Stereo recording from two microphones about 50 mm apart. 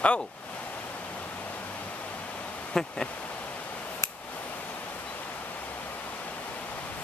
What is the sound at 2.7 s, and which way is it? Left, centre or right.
Speech, centre.